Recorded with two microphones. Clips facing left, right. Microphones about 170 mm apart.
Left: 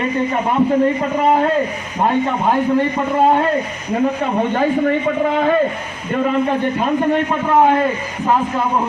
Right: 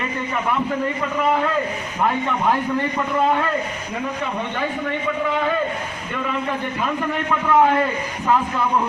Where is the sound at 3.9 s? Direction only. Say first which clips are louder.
Left 10 dB; 45° left (ahead or behind).